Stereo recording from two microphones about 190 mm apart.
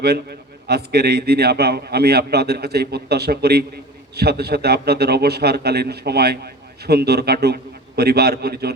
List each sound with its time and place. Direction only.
0.0 s a man's voice: 60° right (ahead or behind)